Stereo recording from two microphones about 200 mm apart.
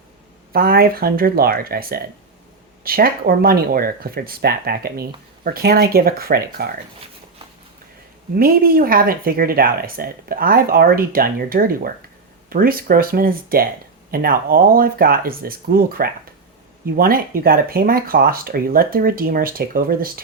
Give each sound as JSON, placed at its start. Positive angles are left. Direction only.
{"t": 0.5, "sound": "speech", "side_deg": -50}
{"t": 8.4, "sound": "speech", "side_deg": -50}